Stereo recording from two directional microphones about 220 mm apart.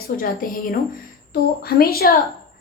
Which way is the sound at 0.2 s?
40° left (ahead or behind).